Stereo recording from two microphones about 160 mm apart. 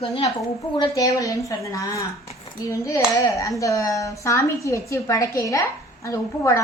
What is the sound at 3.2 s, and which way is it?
A woman's voice, 20° left (ahead or behind).